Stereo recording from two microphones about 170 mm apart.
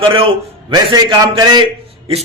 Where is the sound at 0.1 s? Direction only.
30° right (ahead or behind).